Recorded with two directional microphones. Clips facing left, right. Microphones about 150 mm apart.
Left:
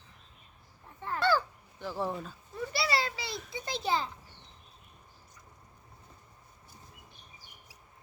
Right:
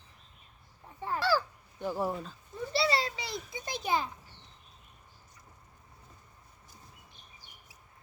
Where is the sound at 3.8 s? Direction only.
15° right (ahead or behind).